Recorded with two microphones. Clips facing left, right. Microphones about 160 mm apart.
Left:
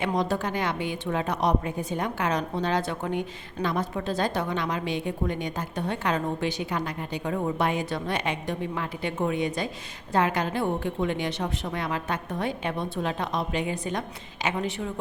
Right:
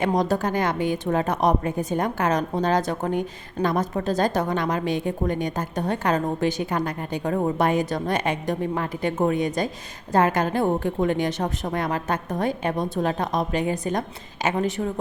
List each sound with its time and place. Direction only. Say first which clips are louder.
0.0 s a woman's voice: right 4 dB; 40° right (ahead or behind)